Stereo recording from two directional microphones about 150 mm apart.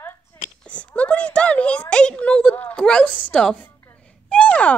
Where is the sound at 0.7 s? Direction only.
10° left (ahead or behind).